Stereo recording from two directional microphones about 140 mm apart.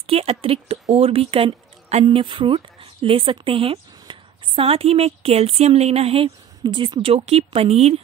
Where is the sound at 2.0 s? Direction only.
35° right (ahead or behind).